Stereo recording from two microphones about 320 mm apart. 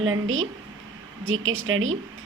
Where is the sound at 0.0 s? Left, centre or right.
Right.